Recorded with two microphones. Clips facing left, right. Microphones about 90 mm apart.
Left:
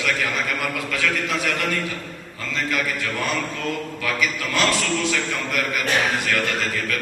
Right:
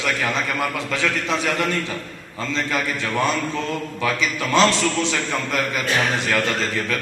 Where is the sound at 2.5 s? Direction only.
25° right (ahead or behind).